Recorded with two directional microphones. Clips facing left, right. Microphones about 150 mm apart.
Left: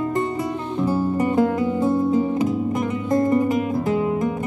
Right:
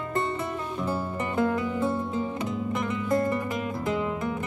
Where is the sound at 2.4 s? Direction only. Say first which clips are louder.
Left 7 dB; 35° left (ahead or behind).